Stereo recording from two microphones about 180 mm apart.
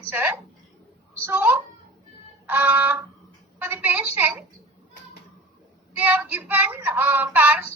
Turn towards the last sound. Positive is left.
turn(degrees=-10)  # may be behind; listen again after turning